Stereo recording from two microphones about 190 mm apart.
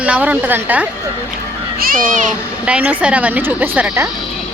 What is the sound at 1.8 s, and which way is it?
Speech, 45° right (ahead or behind).